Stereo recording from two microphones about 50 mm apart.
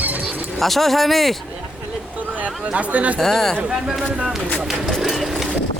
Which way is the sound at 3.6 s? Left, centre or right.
Centre.